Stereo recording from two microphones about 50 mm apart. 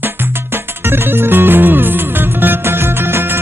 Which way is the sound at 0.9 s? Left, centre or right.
Right.